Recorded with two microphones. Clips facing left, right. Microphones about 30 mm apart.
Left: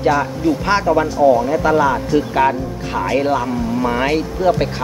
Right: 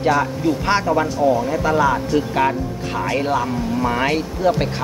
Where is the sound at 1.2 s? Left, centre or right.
Left.